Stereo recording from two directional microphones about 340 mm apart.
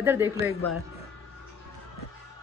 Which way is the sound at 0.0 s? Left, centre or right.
Centre.